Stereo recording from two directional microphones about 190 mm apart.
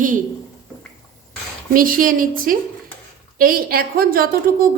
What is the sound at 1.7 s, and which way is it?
A woman's voice, 45° right (ahead or behind).